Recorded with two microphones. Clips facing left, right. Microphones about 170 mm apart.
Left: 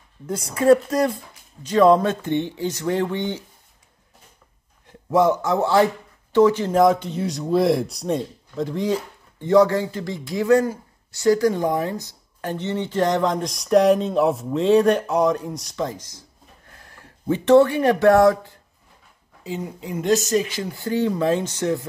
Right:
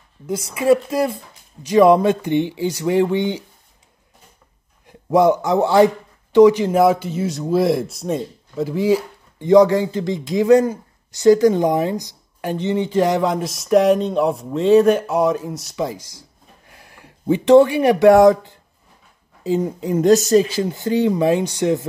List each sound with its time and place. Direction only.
0.6 s speech: 10° right (ahead or behind)
4.8 s a man's voice: 15° right (ahead or behind)
19.4 s speech: 40° right (ahead or behind)
20.7 s speech: 20° right (ahead or behind)